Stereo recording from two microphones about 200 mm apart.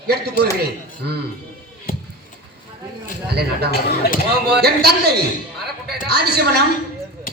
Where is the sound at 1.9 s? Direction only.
45° left (ahead or behind).